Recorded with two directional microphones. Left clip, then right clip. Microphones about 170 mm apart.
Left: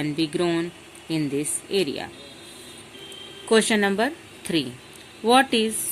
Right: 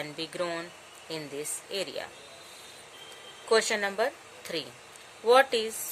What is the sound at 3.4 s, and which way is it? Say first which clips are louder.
A woman's voice: left 6 dB; 25° left (ahead or behind).